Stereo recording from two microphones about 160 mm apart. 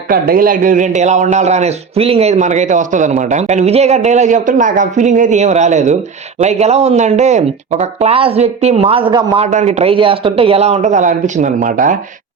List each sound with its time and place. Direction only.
0.1 s a man's voice: 65° right (ahead or behind); by 9.5 s 35° right (ahead or behind)
9.5 s a man's voice: 50° right (ahead or behind)